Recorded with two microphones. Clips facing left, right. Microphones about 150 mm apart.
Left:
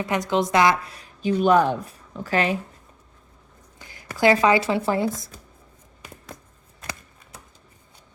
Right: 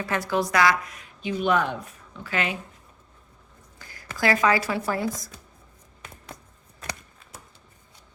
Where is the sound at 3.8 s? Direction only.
20° left (ahead or behind).